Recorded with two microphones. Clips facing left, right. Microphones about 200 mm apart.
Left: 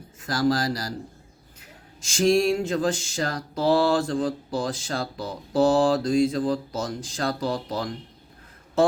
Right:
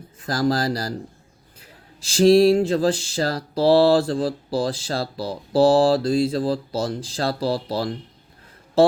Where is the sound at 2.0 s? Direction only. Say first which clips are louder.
Right 6 dB; 35° right (ahead or behind).